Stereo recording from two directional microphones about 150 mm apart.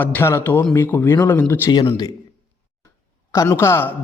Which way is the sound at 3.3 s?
20° left (ahead or behind).